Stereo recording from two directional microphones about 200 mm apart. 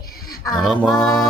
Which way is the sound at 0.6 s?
Centre (ahead or behind).